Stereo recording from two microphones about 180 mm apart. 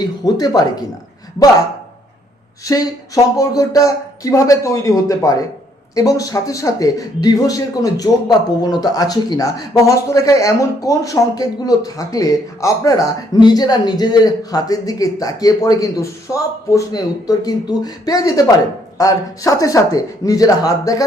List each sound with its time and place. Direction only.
0.0 s speech: 25° left (ahead or behind)
2.7 s speech: 20° left (ahead or behind)